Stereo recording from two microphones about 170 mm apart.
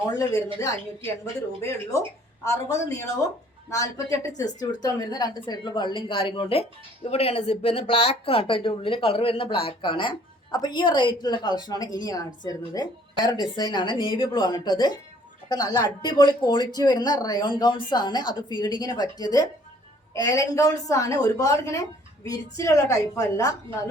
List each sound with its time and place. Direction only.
0.1 s a woman's voice: 20° left (ahead or behind)